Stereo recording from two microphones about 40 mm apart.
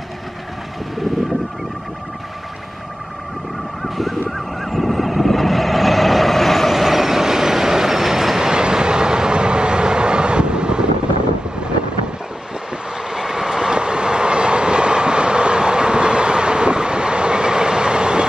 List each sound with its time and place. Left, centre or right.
3.8 s fowl: centre
4.6 s vehicle: centre; by 10.9 s right
13.1 s train: centre